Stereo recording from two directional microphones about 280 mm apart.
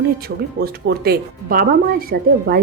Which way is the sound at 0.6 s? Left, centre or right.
Right.